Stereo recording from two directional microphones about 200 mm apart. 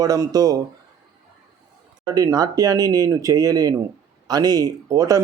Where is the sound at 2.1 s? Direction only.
15° right (ahead or behind).